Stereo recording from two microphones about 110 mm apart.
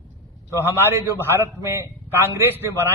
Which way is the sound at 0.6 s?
20° right (ahead or behind).